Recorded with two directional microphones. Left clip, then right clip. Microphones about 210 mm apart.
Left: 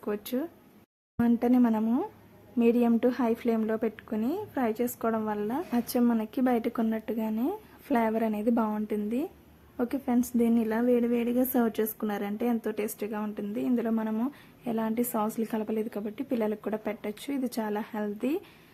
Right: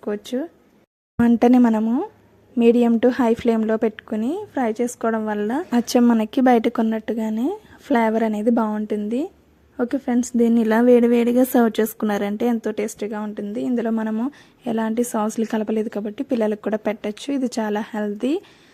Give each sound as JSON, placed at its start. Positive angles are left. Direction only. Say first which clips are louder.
{"t": 0.0, "sound": "a woman's voice", "louder": "right 7 dB", "side_deg": -25}
{"t": 1.1, "sound": "a woman's voice", "louder": "right 10 dB", "side_deg": -35}